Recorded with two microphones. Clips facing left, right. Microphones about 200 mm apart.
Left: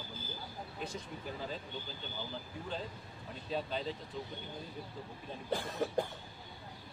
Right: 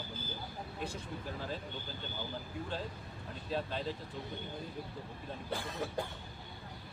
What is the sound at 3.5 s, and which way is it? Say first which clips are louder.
Speech: even; centre (ahead or behind).